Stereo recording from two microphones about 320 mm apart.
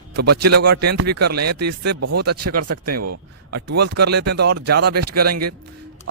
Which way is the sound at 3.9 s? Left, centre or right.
Right.